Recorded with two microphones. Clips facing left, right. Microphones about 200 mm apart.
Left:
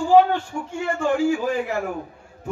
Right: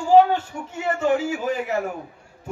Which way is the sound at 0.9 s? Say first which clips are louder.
Left 2 dB; 20° right (ahead or behind).